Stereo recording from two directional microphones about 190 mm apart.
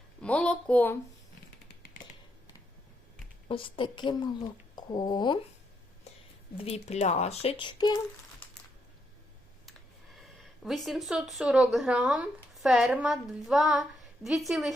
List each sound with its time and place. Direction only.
0.2 s speech: 5° left (ahead or behind)
1.6 s finger snapping: 55° left (ahead or behind)
3.5 s a woman's voice: 25° left (ahead or behind)
6.7 s speech: 35° left (ahead or behind)
10.6 s speech: centre (ahead or behind)